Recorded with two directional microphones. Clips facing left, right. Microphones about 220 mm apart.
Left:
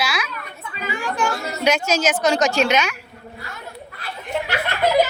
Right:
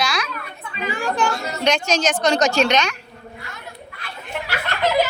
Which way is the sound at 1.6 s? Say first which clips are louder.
Left 1 dB; 5° left (ahead or behind).